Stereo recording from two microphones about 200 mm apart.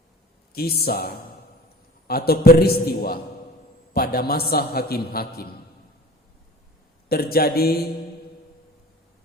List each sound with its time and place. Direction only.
0.5 s a man's voice: 50° left (ahead or behind)
7.1 s a man's voice: 50° left (ahead or behind)